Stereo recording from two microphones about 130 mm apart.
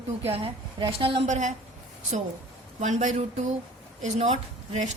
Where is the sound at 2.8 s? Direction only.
65° right (ahead or behind).